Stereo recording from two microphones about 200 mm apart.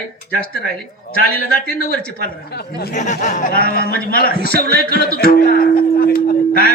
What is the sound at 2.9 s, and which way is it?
A man's voice, 35° left (ahead or behind).